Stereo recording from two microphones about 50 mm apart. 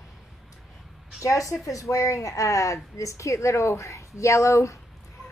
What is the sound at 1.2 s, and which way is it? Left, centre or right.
Speech, left.